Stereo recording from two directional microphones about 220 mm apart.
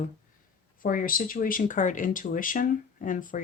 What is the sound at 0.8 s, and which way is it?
Speech, 40° left (ahead or behind).